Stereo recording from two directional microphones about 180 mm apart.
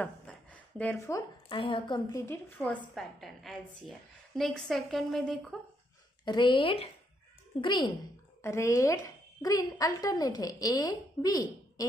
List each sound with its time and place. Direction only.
0.0 s a sound: 5° left (ahead or behind)
1.5 s a woman's voice: 30° left (ahead or behind); by 5.6 s 5° left (ahead or behind)
6.2 s a woman's voice: 25° left (ahead or behind)
8.4 s a woman's voice: 15° left (ahead or behind)